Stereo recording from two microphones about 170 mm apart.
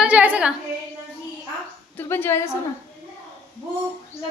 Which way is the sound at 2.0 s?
15° left (ahead or behind).